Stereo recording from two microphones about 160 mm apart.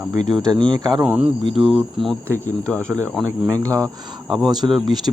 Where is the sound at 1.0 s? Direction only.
10° right (ahead or behind).